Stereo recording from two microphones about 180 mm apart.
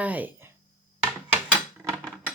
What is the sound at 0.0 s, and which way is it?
Speech, 10° right (ahead or behind).